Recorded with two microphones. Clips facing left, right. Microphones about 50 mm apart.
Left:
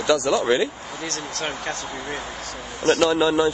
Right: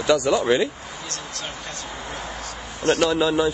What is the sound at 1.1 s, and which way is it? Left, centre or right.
Speech, left.